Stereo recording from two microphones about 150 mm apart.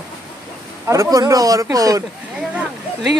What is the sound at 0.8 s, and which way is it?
Speech, 25° right (ahead or behind).